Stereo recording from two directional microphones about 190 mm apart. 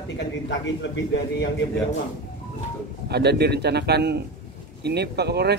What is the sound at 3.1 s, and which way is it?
A man's voice, 60° right (ahead or behind).